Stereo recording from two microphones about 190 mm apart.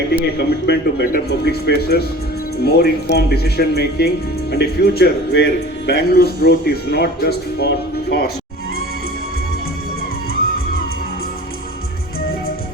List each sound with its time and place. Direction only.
0.1 s speech: 60° left (ahead or behind)
10.4 s music: 50° left (ahead or behind)